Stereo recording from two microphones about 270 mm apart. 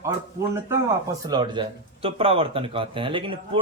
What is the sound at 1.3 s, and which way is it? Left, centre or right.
Speech, centre.